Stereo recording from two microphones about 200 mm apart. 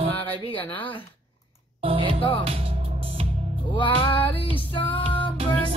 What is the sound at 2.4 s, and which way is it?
Speech, 30° right (ahead or behind).